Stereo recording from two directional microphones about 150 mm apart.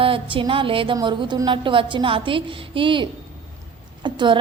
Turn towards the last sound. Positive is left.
turn(degrees=-30)  # may be behind; listen again after turning